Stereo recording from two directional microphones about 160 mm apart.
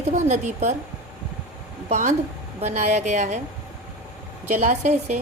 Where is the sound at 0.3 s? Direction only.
45° right (ahead or behind).